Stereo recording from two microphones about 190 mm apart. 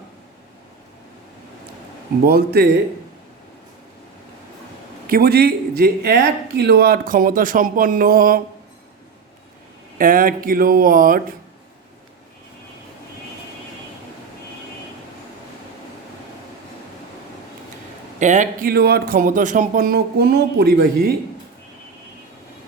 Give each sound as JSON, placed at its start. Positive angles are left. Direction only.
{"t": 2.2, "sound": "a man's voice", "side_deg": -55}
{"t": 5.0, "sound": "speech", "side_deg": -50}
{"t": 10.0, "sound": "speech", "side_deg": -45}
{"t": 18.2, "sound": "a man's voice", "side_deg": -40}
{"t": 18.7, "sound": "speech", "side_deg": -55}